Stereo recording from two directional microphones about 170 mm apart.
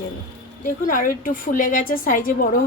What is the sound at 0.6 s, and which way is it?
A woman's voice, 50° left (ahead or behind).